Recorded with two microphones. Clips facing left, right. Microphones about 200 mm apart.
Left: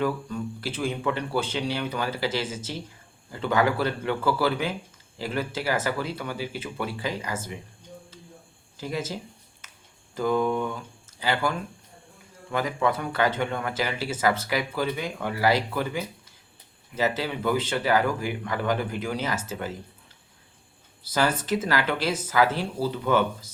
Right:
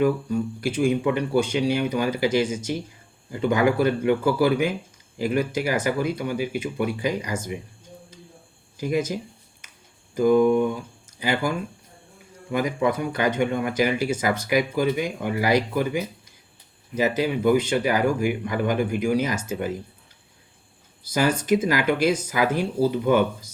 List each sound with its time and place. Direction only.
0.0 s speech: 15° right (ahead or behind)
8.8 s speech: 15° right (ahead or behind)
10.2 s speech: 15° right (ahead or behind)
21.1 s speech: 10° right (ahead or behind)